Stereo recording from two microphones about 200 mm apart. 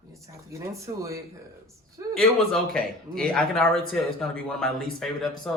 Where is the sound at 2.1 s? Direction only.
5° left (ahead or behind).